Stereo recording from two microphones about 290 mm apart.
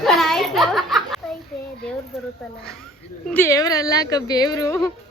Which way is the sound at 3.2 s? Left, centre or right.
Centre.